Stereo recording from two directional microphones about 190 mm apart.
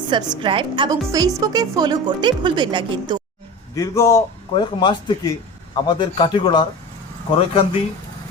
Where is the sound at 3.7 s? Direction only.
15° left (ahead or behind).